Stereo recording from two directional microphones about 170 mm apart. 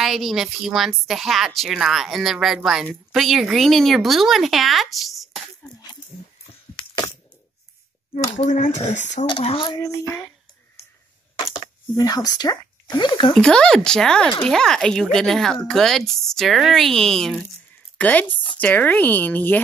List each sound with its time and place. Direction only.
0.0 s speech: centre (ahead or behind)
8.4 s speech: 45° left (ahead or behind)
9.4 s speech: 30° left (ahead or behind)
11.9 s speech: 20° left (ahead or behind)
13.3 s a woman's voice: 5° left (ahead or behind)